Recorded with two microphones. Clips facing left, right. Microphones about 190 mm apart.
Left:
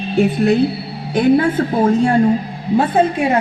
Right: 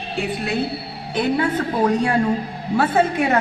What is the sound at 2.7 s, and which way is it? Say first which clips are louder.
Speech: left 3 dB; 15° left (ahead or behind).